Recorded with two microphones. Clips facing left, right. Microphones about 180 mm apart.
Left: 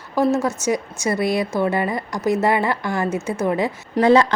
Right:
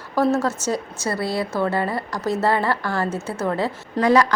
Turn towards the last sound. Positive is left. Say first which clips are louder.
# left 3 dB
turn(degrees=25)  # may be behind; listen again after turning